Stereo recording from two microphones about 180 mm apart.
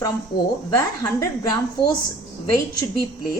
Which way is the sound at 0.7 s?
15° left (ahead or behind).